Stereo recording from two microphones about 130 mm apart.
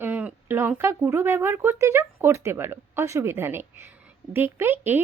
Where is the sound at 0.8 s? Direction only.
20° right (ahead or behind).